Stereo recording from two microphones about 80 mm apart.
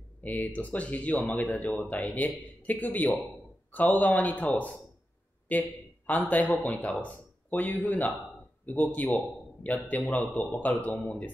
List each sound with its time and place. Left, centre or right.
0.2 s a man's voice: left